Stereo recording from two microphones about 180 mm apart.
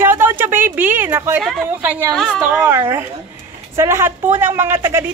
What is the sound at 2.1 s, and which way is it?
Speech, 5° left (ahead or behind).